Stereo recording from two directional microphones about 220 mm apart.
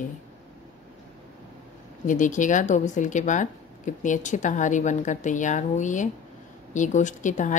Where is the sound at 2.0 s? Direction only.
35° left (ahead or behind).